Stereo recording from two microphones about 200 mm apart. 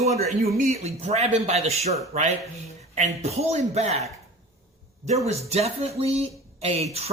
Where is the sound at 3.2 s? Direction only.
35° right (ahead or behind).